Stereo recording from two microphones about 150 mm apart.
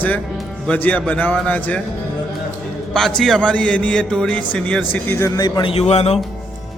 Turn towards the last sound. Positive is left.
turn(degrees=45)  # may be behind; listen again after turning